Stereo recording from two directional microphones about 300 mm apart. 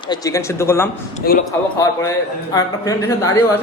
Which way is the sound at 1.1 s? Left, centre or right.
Left.